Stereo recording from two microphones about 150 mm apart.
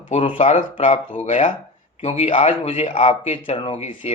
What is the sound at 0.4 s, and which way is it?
Speech, 55° left (ahead or behind).